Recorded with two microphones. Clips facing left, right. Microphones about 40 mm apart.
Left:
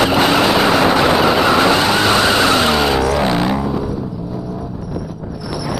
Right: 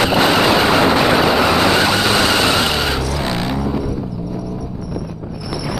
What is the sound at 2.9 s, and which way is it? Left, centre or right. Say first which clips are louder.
Vehicle: left 6 dB; left.